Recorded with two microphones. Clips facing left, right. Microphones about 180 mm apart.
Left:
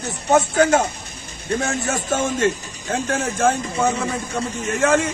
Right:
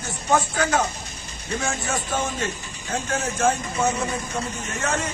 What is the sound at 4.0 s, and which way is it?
A man's voice, 65° left (ahead or behind).